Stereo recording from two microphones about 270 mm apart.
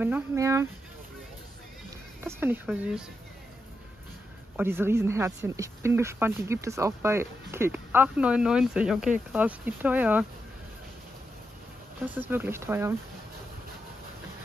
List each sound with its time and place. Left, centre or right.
0.0 s speech: centre
2.2 s speech: centre
4.6 s speech: centre
12.0 s speech: centre